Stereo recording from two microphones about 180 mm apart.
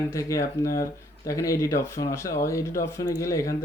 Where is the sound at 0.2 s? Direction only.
15° left (ahead or behind).